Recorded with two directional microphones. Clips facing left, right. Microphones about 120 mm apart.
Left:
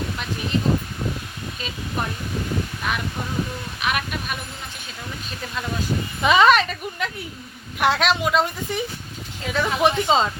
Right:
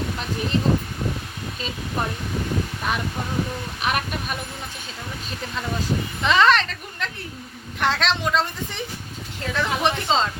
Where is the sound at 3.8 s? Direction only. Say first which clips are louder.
Even; 35° right (ahead or behind).